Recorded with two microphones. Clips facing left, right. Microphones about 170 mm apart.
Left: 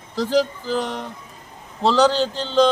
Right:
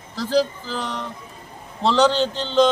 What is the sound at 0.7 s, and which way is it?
Speech, 50° left (ahead or behind).